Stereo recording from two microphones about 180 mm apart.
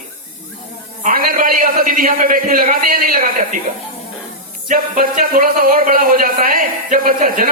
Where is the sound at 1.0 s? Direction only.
50° right (ahead or behind).